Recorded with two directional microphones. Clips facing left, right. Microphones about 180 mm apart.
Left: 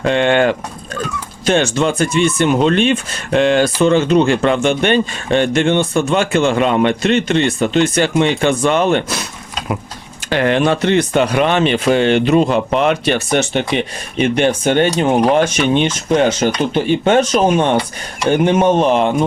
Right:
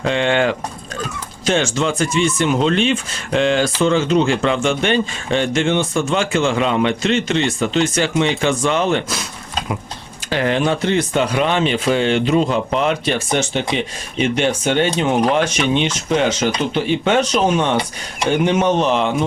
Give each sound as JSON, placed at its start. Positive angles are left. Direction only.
{"t": 0.0, "sound": "speech", "side_deg": 55}
{"t": 10.2, "sound": "speech", "side_deg": 65}